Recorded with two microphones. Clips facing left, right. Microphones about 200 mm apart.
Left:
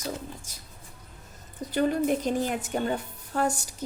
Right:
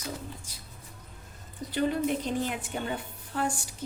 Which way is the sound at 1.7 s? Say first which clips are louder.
Left 3 dB; 45° left (ahead or behind).